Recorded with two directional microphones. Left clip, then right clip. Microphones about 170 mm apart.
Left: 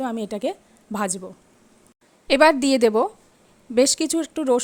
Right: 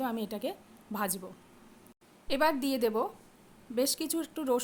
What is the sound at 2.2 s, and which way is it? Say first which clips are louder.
A woman's voice: left 13 dB; 45° left (ahead or behind).